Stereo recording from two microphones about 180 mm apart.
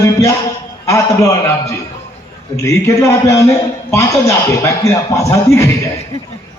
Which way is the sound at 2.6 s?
15° left (ahead or behind).